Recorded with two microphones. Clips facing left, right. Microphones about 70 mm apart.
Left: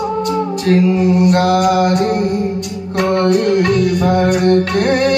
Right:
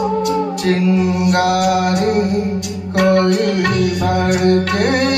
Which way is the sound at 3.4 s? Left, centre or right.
Right.